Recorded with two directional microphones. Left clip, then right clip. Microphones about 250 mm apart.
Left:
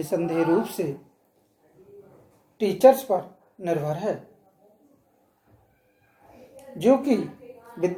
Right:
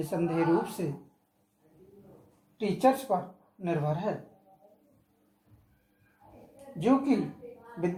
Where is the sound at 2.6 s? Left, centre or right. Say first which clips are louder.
Left 9 dB; left.